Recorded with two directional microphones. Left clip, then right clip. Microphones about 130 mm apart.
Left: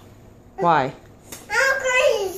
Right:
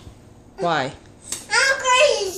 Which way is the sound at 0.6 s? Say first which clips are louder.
Left 3 dB; 30° left (ahead or behind).